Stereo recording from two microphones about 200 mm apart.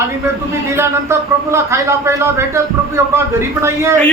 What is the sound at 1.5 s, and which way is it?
Speech, 15° right (ahead or behind).